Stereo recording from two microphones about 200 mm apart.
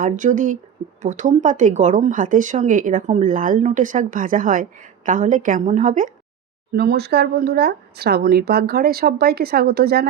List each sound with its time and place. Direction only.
0.0 s speech: 40° right (ahead or behind)
6.7 s speech: 55° right (ahead or behind)